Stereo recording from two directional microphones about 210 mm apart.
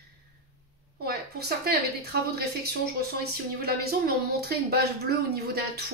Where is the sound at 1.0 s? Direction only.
50° right (ahead or behind).